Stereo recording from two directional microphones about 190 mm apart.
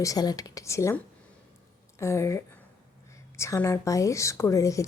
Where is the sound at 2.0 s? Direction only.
15° left (ahead or behind).